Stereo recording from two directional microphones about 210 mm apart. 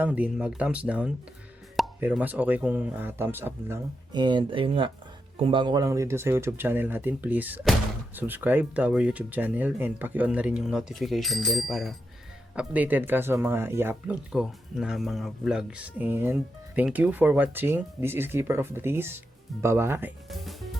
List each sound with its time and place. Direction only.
0.0 s speech: 5° right (ahead or behind)
4.1 s speech: 20° right (ahead or behind); by 20.7 s centre (ahead or behind)